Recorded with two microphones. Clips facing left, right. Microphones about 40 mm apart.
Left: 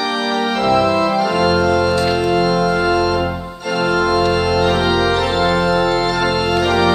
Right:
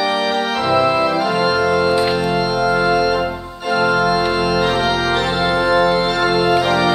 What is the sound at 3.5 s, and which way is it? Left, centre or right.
Organ, centre.